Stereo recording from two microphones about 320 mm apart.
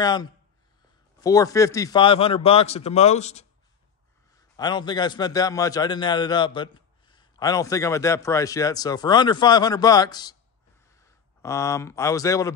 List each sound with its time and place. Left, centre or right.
0.0 s a man's voice: centre